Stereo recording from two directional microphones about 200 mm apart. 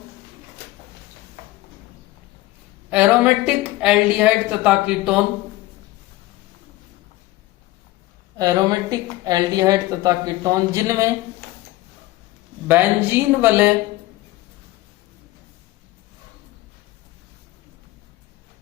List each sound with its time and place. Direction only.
2.9 s a woman's voice: 5° right (ahead or behind)
8.4 s speech: 20° right (ahead or behind)
12.6 s speech: 10° right (ahead or behind)